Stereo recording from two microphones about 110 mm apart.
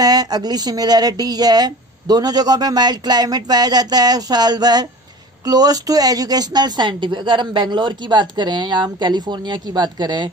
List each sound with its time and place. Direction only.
0.0 s a woman's voice: 35° right (ahead or behind)